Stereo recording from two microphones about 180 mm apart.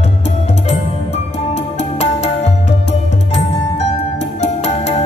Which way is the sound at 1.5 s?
40° left (ahead or behind).